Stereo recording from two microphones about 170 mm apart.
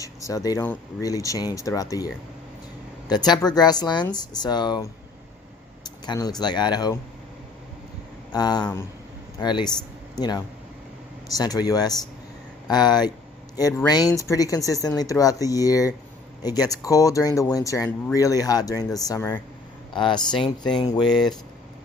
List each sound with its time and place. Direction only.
0.0 s speech: 20° left (ahead or behind)
3.1 s speech: 25° left (ahead or behind)
6.1 s speech: 25° left (ahead or behind)
8.3 s speech: 25° left (ahead or behind)
19.9 s speech: 25° left (ahead or behind)